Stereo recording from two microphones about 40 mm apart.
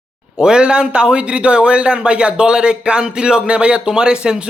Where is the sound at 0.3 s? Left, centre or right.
Centre.